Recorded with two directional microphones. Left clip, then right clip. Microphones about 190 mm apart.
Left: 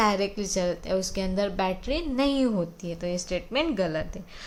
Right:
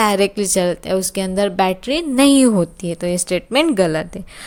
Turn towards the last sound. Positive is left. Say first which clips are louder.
# right 11 dB
turn(degrees=-55)  # may be behind; listen again after turning